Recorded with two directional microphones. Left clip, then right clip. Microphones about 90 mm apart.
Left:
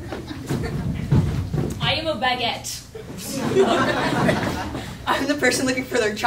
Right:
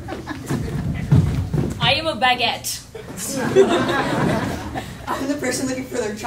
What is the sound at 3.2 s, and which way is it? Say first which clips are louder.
Speech: right 4 dB; 35° right (ahead or behind).